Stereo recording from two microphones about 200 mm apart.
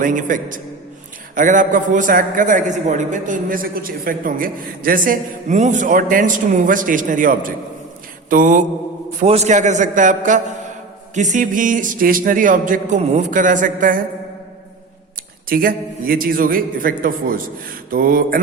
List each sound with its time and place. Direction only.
0.0 s a man's voice: 40° right (ahead or behind)
15.4 s a man's voice: 45° right (ahead or behind)